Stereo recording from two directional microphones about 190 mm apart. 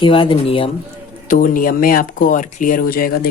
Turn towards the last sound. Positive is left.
turn(degrees=50)  # may be behind; listen again after turning